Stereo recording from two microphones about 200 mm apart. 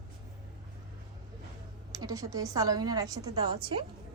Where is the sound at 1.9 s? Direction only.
15° right (ahead or behind).